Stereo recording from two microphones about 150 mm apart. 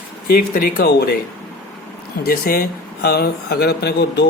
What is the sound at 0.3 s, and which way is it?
Speech, 75° left (ahead or behind).